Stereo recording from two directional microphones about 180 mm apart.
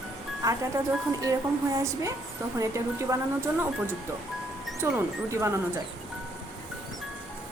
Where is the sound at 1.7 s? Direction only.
15° right (ahead or behind).